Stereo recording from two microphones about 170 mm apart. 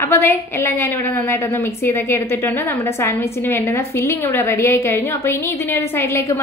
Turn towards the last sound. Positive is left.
turn(degrees=15)  # may be behind; listen again after turning